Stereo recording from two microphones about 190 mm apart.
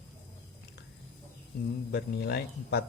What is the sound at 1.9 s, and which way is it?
Speech, 55° left (ahead or behind).